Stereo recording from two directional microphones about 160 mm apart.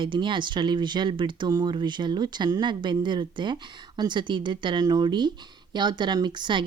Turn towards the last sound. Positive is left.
turn(degrees=-30)  # may be behind; listen again after turning